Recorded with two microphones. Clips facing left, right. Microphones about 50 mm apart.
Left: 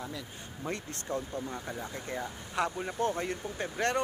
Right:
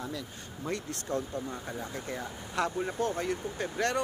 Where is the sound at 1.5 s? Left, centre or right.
Centre.